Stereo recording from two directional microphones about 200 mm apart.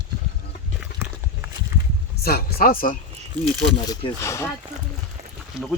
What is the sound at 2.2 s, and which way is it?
Speech, 50° left (ahead or behind).